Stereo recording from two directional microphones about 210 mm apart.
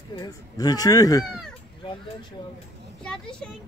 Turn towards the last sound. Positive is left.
turn(degrees=5)  # may be behind; listen again after turning